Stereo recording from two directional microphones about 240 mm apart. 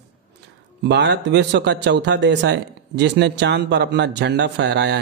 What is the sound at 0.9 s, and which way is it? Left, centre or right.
A man's voice, right.